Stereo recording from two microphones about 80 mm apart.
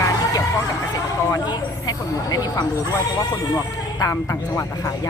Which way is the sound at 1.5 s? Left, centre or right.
Left.